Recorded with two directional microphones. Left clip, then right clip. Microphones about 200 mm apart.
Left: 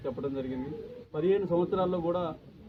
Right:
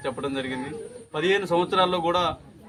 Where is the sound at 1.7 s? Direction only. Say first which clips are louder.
Right 8 dB; centre (ahead or behind).